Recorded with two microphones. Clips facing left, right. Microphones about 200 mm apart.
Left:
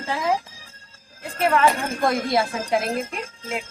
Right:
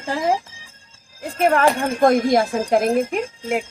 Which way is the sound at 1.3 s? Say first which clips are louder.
Right 3 dB; 45° right (ahead or behind).